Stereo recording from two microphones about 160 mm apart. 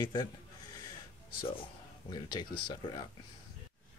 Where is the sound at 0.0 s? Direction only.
25° left (ahead or behind).